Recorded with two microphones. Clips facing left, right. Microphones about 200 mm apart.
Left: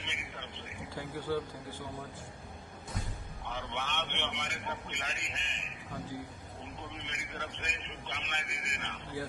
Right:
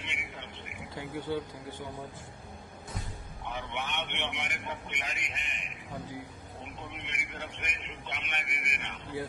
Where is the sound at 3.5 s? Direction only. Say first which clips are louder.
Right 2 dB; 15° right (ahead or behind).